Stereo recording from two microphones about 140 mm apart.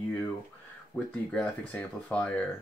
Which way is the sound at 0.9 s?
15° left (ahead or behind).